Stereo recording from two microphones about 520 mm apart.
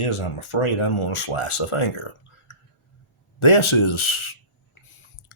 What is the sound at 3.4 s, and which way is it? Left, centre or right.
Speech, left.